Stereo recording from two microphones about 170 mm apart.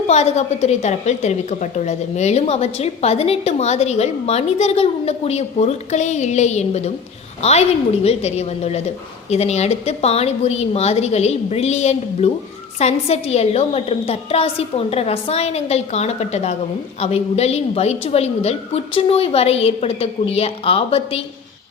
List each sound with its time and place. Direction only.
0.1 s a woman's voice: 40° left (ahead or behind)